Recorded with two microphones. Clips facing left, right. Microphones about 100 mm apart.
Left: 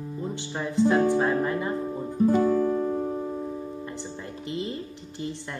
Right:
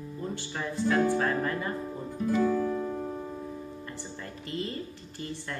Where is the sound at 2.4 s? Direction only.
15° left (ahead or behind).